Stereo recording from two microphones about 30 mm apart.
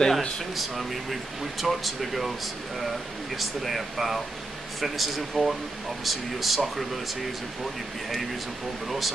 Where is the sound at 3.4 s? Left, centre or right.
Centre.